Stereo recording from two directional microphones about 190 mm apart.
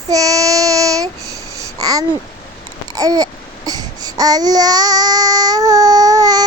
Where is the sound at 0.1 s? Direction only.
20° right (ahead or behind).